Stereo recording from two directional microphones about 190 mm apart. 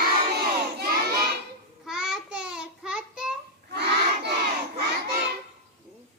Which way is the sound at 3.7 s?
60° right (ahead or behind).